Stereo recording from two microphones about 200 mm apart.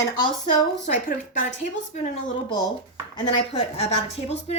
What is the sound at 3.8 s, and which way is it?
Speech, 35° left (ahead or behind).